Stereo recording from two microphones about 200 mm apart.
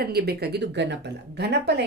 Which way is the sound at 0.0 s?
50° right (ahead or behind).